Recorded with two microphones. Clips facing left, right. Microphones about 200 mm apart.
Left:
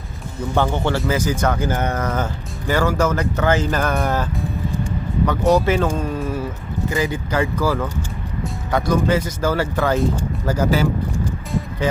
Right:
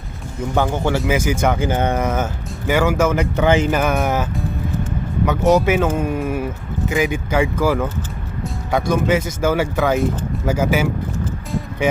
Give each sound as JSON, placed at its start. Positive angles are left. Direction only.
{"t": 0.5, "sound": "speech", "side_deg": -10}
{"t": 4.4, "sound": "music", "side_deg": -5}
{"t": 5.4, "sound": "speech", "side_deg": 0}
{"t": 5.6, "sound": "speech", "side_deg": -15}
{"t": 8.9, "sound": "speech", "side_deg": -20}